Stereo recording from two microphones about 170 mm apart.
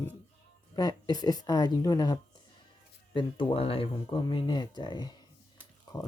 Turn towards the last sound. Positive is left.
turn(degrees=20)  # may be behind; listen again after turning